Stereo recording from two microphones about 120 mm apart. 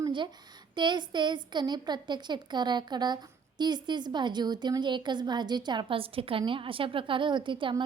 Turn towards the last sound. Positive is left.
turn(degrees=-45)  # may be behind; listen again after turning